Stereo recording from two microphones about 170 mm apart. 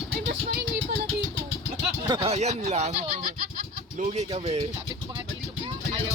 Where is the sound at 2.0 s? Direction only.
25° right (ahead or behind).